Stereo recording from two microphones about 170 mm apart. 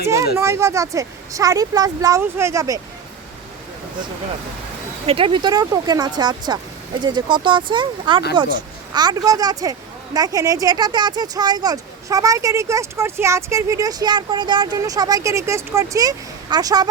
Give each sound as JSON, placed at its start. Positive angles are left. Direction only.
{"t": 0.3, "sound": "speech", "side_deg": -15}
{"t": 5.0, "sound": "speech", "side_deg": -30}